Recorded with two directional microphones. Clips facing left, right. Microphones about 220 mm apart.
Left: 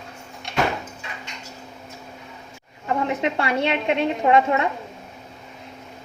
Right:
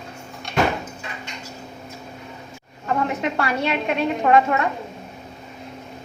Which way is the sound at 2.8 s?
25° left (ahead or behind).